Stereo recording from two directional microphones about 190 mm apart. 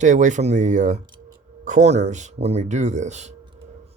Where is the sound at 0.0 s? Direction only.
40° right (ahead or behind).